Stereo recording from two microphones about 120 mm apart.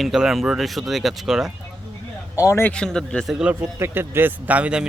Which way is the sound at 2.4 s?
20° left (ahead or behind).